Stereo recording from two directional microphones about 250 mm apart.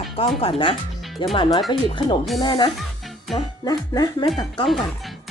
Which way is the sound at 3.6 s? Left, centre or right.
Centre.